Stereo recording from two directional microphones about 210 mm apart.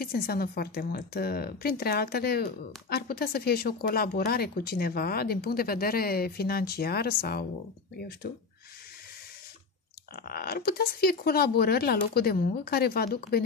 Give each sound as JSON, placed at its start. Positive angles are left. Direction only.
{"t": 0.0, "sound": "speech", "side_deg": 45}
{"t": 10.1, "sound": "speech", "side_deg": 45}